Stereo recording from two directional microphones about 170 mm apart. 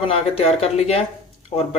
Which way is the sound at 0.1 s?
35° left (ahead or behind).